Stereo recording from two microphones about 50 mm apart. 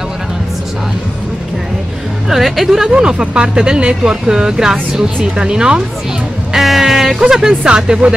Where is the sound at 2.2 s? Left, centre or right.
Centre.